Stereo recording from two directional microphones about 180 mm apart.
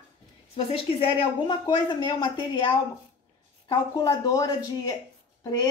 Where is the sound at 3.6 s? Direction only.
20° left (ahead or behind).